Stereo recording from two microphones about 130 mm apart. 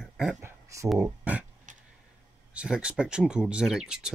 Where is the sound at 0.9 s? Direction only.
15° right (ahead or behind).